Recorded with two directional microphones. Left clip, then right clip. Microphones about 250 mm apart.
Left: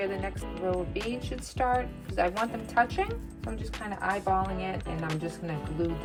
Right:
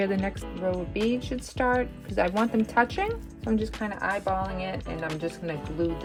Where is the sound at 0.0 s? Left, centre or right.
Right.